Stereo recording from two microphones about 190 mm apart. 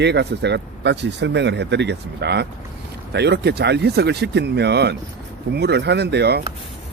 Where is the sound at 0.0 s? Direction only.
65° right (ahead or behind).